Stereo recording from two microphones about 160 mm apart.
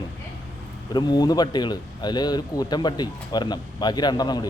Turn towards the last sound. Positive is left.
turn(degrees=25)  # may be behind; listen again after turning